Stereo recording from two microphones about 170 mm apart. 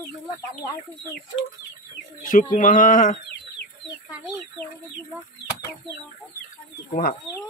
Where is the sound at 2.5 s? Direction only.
50° left (ahead or behind).